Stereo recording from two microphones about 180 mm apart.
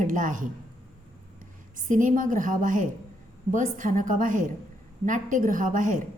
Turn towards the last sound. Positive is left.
turn(degrees=-45)  # may be behind; listen again after turning